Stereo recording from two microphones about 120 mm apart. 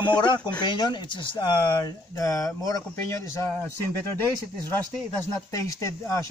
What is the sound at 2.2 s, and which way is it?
Speech, 30° left (ahead or behind).